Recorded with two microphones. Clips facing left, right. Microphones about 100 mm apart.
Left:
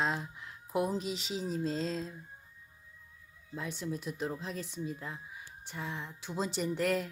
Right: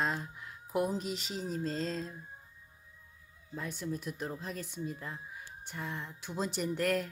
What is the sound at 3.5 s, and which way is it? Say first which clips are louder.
Speech: even; centre (ahead or behind).